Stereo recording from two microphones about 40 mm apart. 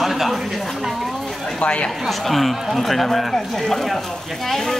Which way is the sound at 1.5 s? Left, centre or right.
Left.